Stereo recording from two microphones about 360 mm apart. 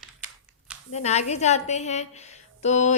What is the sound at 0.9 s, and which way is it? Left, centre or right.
A woman's voice, centre.